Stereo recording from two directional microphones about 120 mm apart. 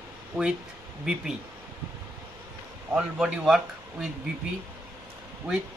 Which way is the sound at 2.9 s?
5° right (ahead or behind).